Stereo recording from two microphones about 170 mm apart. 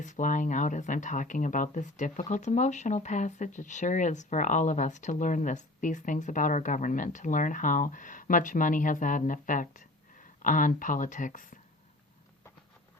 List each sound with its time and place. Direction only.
0.0 s speech: 45° left (ahead or behind)